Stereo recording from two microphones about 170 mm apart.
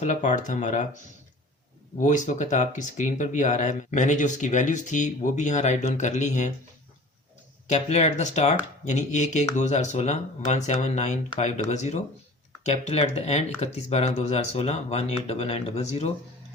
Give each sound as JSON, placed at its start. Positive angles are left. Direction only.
{"t": 0.0, "sound": "speech", "side_deg": 45}
{"t": 7.7, "sound": "speech", "side_deg": 40}